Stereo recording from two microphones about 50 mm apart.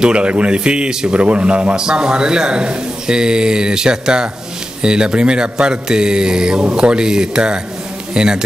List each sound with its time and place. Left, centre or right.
0.0 s a man's voice: right